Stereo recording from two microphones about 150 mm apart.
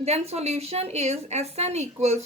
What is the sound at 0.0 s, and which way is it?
A woman's voice, 45° right (ahead or behind).